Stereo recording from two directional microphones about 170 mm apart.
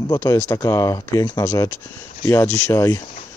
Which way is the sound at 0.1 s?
15° left (ahead or behind).